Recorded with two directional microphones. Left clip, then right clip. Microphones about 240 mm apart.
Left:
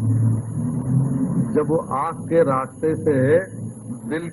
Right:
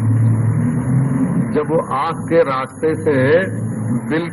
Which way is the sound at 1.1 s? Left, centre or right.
Right.